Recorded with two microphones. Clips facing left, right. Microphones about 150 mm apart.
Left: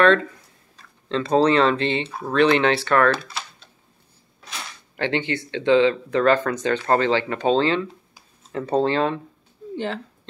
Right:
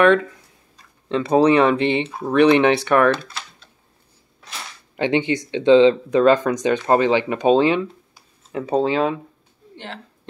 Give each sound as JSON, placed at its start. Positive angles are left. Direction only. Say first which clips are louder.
{"t": 1.0, "sound": "speech", "louder": "right 3 dB", "side_deg": -15}
{"t": 4.9, "sound": "speech", "louder": "right 5 dB", "side_deg": -15}